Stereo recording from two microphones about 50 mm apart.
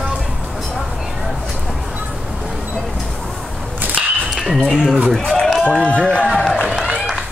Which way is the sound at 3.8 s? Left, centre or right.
Right.